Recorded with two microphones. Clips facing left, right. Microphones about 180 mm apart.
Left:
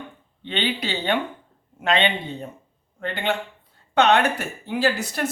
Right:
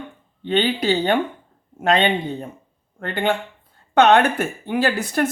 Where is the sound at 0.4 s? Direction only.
45° right (ahead or behind).